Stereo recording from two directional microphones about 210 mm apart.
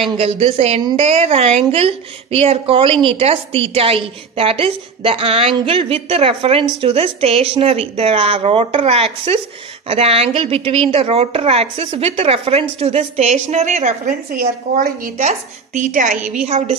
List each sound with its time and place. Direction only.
0.2 s speech: 30° right (ahead or behind)